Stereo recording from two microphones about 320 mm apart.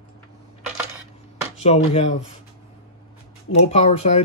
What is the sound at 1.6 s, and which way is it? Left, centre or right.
Speech, centre.